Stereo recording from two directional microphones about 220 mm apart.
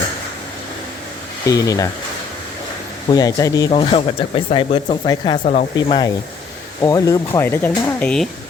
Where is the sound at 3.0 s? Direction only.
15° left (ahead or behind).